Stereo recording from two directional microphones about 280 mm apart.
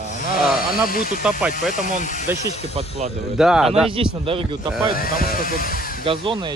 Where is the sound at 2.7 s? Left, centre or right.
Right.